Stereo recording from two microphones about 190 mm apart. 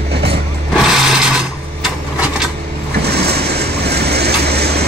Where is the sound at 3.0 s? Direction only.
60° right (ahead or behind).